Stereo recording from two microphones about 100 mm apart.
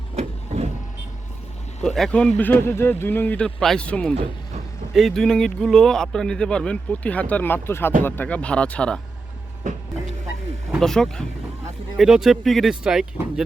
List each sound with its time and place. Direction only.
0.2 s vehicle: 90° right
1.8 s speech: 5° left (ahead or behind)
2.6 s speech: 25° left (ahead or behind)
10.8 s speech: 5° left (ahead or behind)